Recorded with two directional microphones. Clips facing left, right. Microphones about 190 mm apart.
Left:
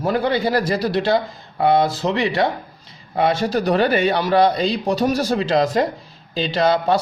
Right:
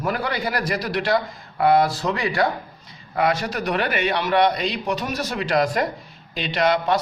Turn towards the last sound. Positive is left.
turn(degrees=30)  # may be behind; listen again after turning